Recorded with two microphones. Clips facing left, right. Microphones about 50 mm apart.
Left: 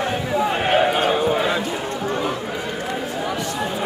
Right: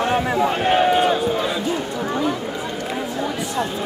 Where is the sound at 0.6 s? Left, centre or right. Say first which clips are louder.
Right 2 dB; centre.